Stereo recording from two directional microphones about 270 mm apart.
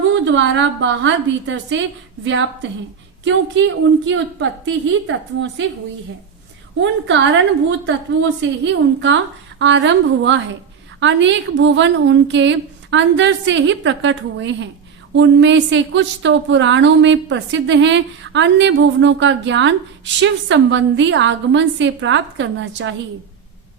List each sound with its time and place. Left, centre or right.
0.1 s a woman's voice: right
4.0 s a woman's voice: right
7.1 s a woman's voice: right